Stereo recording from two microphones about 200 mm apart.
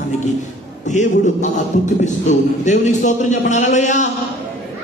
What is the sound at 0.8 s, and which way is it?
A man's voice, 35° left (ahead or behind).